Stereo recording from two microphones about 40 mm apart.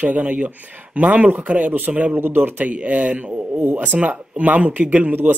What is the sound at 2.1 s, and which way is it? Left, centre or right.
Speech, right.